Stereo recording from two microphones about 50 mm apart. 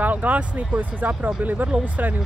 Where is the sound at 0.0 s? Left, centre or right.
Right.